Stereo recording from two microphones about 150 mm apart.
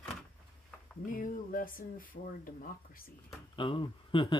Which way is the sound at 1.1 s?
65° left (ahead or behind).